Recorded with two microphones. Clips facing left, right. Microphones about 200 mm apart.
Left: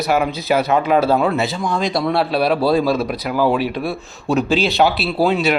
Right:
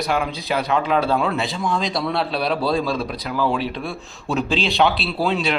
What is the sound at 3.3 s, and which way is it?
Speech, 40° left (ahead or behind).